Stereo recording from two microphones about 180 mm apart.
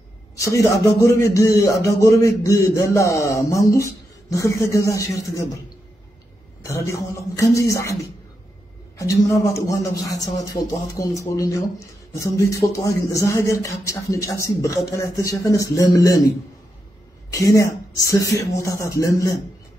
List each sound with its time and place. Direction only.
0.4 s a man's voice: 15° left (ahead or behind)
6.6 s a man's voice: 15° left (ahead or behind)
17.3 s a man's voice: 20° left (ahead or behind)